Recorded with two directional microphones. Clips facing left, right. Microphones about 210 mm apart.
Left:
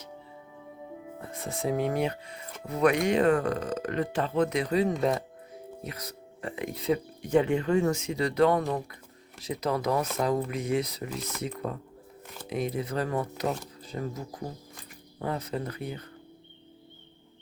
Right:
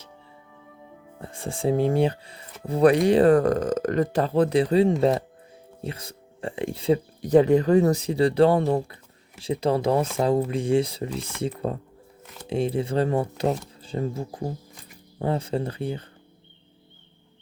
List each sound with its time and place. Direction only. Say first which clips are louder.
1.2 s speech: right 6 dB; 30° right (ahead or behind)